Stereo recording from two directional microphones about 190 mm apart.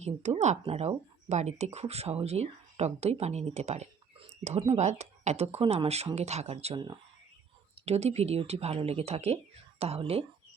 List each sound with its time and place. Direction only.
0.0 s speech: 35° right (ahead or behind)